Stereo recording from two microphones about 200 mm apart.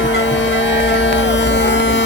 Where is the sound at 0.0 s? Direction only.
65° left (ahead or behind).